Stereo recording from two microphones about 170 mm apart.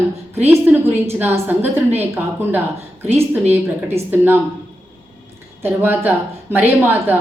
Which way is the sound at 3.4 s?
40° right (ahead or behind).